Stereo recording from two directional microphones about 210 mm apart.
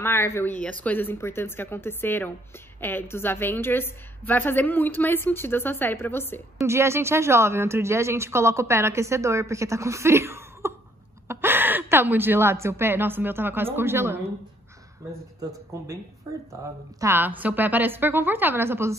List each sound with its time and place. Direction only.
0.0 s a woman's voice: 10° left (ahead or behind)
6.6 s a woman's voice: 10° right (ahead or behind)
16.3 s speech: 15° right (ahead or behind)